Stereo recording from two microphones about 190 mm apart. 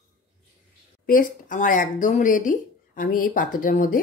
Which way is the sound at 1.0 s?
45° left (ahead or behind).